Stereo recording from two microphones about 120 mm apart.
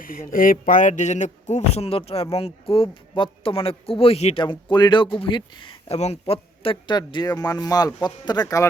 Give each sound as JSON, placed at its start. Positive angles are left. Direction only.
{"t": 0.6, "sound": "speech", "side_deg": 90}
{"t": 4.4, "sound": "a man's voice", "side_deg": 40}